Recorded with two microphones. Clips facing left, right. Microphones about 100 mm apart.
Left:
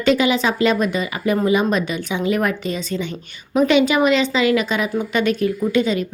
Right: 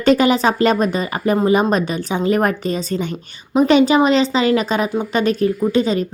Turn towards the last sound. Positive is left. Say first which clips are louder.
# right 2 dB
turn(degrees=-35)  # may be behind; listen again after turning